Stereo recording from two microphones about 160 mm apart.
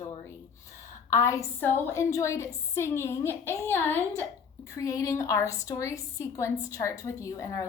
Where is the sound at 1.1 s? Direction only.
20° left (ahead or behind).